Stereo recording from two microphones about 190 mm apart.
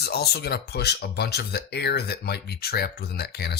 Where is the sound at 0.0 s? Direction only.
55° left (ahead or behind).